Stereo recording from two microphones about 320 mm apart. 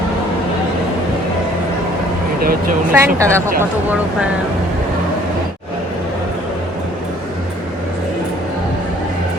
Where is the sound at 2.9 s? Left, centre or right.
Centre.